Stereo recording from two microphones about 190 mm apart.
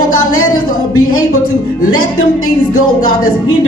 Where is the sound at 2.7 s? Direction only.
90° left.